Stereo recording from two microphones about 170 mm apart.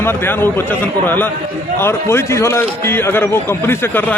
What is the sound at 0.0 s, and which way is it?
A man's voice, 15° left (ahead or behind).